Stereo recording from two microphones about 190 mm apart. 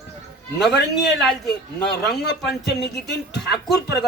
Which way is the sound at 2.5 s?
60° left (ahead or behind).